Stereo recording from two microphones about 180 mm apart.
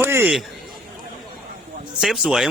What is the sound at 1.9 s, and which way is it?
Speech, 5° right (ahead or behind).